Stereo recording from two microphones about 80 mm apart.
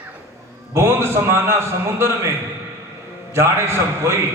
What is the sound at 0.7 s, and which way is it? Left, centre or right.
A man's voice, right.